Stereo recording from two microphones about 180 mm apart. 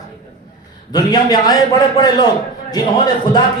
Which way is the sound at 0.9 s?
20° left (ahead or behind).